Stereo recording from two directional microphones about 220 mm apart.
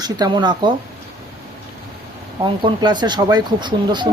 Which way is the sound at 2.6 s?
20° right (ahead or behind).